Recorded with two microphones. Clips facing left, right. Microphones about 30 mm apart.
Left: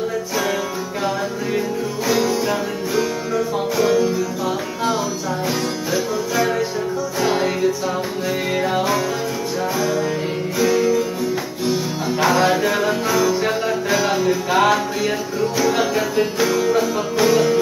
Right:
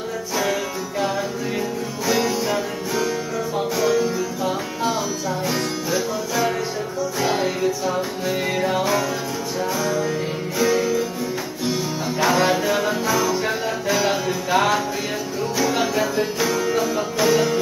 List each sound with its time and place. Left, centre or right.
2.0 s music: centre
10.6 s music: centre